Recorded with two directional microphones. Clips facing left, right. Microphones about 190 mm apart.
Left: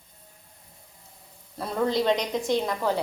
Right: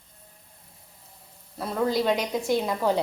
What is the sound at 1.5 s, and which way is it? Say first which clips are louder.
A woman's voice: even; centre (ahead or behind).